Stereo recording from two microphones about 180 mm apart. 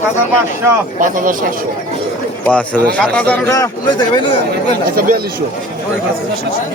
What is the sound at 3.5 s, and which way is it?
Speech, 20° left (ahead or behind).